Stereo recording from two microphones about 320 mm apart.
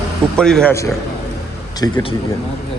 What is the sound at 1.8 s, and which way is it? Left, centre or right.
Speech, centre.